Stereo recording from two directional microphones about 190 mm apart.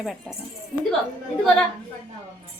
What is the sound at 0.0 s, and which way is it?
Speech, centre (ahead or behind).